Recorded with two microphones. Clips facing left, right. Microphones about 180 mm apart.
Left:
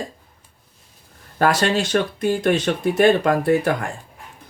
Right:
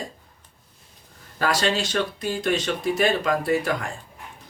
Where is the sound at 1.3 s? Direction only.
55° left (ahead or behind).